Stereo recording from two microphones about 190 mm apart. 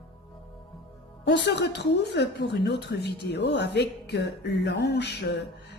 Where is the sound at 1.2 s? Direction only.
65° left (ahead or behind).